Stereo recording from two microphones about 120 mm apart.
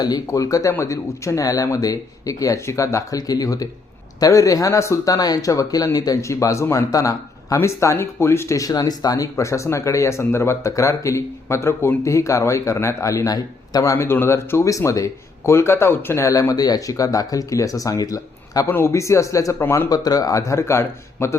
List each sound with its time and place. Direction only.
0.0 s speech: 30° left (ahead or behind)
13.9 s speech: 20° left (ahead or behind)
19.9 s speech: 30° left (ahead or behind)